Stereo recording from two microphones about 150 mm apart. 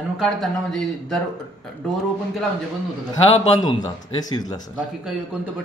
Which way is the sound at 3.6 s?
30° left (ahead or behind).